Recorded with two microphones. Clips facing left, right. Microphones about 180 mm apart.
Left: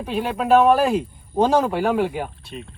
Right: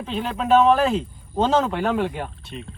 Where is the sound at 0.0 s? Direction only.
10° left (ahead or behind).